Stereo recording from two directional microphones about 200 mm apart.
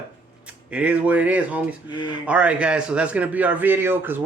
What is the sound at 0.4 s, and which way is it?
A man's voice, 5° right (ahead or behind).